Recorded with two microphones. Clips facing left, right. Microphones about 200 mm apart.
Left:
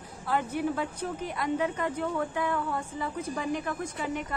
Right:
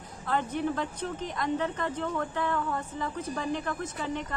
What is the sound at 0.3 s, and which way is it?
Speech, 10° left (ahead or behind).